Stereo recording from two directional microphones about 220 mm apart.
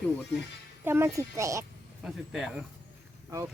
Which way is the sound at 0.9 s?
10° right (ahead or behind).